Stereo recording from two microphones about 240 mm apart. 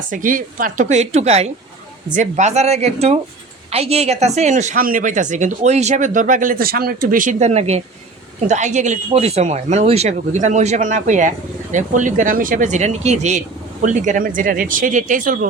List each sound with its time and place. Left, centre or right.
0.1 s speech: right